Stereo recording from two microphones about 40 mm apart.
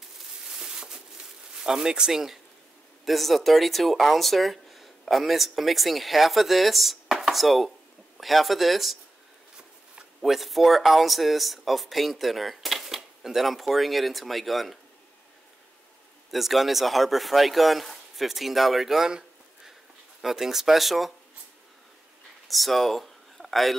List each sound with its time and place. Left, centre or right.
0.6 s a sound: centre
1.6 s speech: centre
3.1 s speech: centre
10.2 s speech: centre
16.3 s speech: centre
22.5 s speech: centre